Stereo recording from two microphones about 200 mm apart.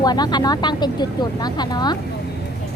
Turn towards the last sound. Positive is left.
turn(degrees=20)  # may be behind; listen again after turning